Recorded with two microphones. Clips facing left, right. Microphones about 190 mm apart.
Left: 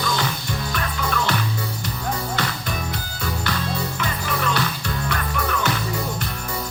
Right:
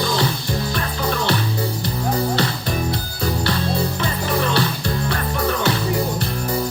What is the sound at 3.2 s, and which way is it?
Music, 35° right (ahead or behind).